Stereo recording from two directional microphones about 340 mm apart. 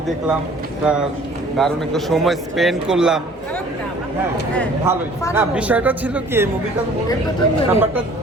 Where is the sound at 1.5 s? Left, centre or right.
Centre.